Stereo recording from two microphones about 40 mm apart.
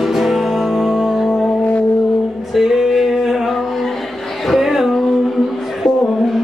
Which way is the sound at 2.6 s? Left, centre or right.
Centre.